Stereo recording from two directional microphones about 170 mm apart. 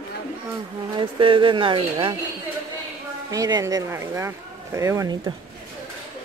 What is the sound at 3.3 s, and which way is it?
Speech, 20° right (ahead or behind).